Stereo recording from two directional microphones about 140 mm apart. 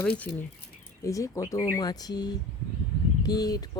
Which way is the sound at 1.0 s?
20° left (ahead or behind).